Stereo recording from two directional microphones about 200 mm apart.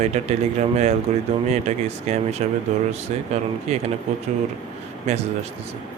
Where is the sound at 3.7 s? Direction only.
35° right (ahead or behind).